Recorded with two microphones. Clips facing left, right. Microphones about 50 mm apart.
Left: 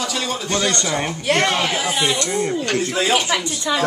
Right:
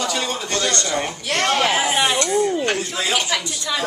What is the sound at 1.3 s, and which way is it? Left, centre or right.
Speech, left.